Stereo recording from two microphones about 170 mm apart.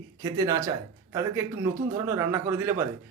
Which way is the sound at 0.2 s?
25° right (ahead or behind).